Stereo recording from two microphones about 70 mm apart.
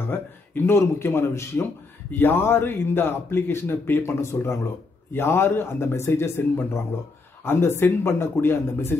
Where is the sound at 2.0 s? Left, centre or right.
Left.